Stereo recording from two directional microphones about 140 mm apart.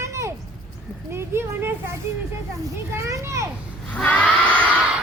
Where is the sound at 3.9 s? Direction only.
10° left (ahead or behind).